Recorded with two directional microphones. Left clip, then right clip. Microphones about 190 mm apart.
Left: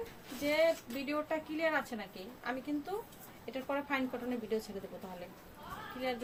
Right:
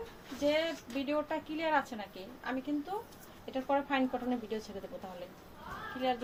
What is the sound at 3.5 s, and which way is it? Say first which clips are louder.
Speech: right 4 dB; 25° left (ahead or behind).